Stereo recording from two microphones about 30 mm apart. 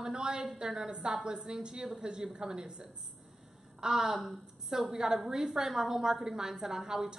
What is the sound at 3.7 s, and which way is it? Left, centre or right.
Speech, right.